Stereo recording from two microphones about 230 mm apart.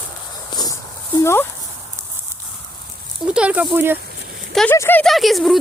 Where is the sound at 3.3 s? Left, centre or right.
Centre.